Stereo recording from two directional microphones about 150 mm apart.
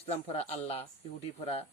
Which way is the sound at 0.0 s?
45° left (ahead or behind).